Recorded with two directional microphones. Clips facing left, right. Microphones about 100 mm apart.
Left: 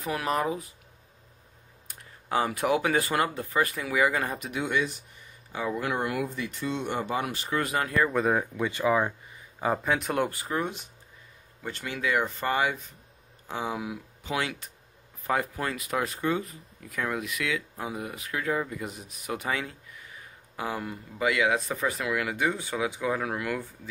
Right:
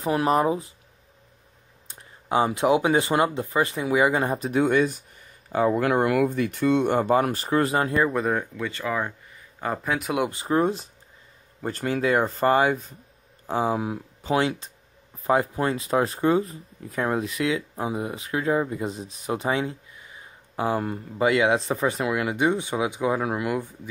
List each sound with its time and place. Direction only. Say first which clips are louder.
0.0 s speech: right 7 dB; 30° right (ahead or behind)
1.9 s speech: right 4 dB; 20° right (ahead or behind); by 7.4 s 45° right (ahead or behind)
7.4 s speech: right 6 dB; 35° right (ahead or behind)
8.1 s a man's voice: right 1 dB; centre (ahead or behind)
8.5 s speech: left 3 dB; 15° left (ahead or behind)
9.6 s a man's voice: even; centre (ahead or behind)
10.3 s speech: right 8 dB; 30° right (ahead or behind)